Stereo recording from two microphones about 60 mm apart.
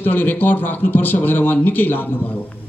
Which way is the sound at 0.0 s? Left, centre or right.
Left.